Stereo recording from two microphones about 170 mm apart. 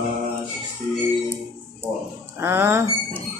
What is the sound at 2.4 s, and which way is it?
Speech, 15° right (ahead or behind).